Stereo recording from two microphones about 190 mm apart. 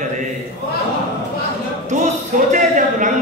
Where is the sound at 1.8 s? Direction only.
40° right (ahead or behind).